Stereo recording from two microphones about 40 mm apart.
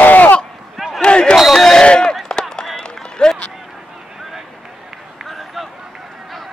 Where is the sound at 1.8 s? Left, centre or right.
Left.